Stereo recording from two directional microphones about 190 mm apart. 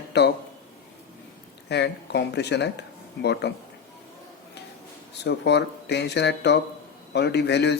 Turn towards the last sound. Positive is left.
turn(degrees=65)  # may be behind; listen again after turning